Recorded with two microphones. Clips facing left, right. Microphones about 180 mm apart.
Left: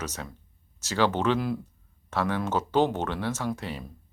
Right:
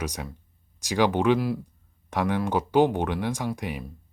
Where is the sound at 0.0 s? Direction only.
15° right (ahead or behind).